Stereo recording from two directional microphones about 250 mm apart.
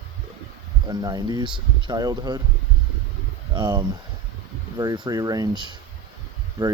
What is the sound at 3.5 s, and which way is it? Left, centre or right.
Speech, centre.